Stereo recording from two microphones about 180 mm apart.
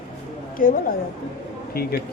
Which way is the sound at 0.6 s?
50° left (ahead or behind).